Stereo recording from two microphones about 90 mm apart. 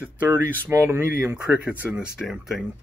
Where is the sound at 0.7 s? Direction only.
30° right (ahead or behind).